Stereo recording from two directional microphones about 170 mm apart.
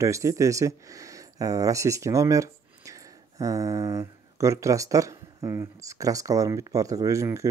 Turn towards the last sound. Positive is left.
turn(degrees=-15)  # may be behind; listen again after turning